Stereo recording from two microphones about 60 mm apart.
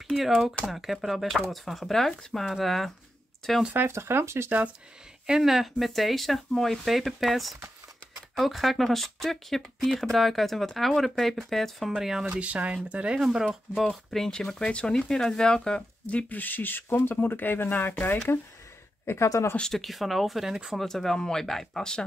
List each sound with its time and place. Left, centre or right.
0.3 s speech: centre
3.7 s speech: right
5.2 s speech: centre
12.0 s speech: centre
12.3 s speech: right
13.2 s speech: centre
13.8 s speech: centre; by 17.9 s left
19.4 s speech: left
19.7 s speech: centre
20.8 s speech: centre